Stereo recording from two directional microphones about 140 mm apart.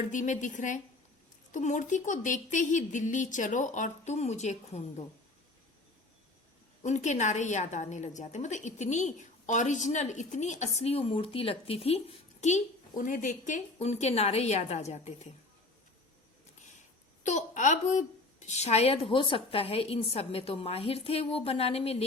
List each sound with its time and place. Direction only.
0.1 s a woman's voice: 65° left (ahead or behind)
6.8 s a woman's voice: 55° left (ahead or behind)
17.2 s a woman's voice: 60° left (ahead or behind)